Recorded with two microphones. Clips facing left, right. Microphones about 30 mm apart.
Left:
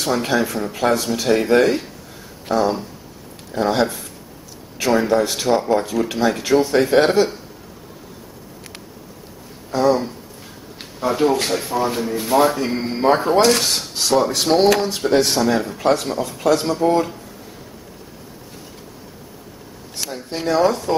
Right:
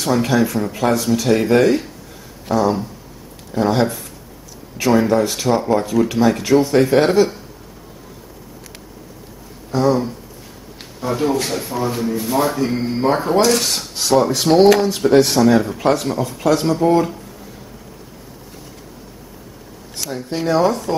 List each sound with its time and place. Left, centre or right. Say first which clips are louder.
0.0 s speech: right 3 dB; centre
0.9 s speech: right 3 dB; left
1.3 s speech: right 1 dB; centre
9.8 s speech: even; left; by 17.1 s centre
20.1 s speech: right 2 dB; centre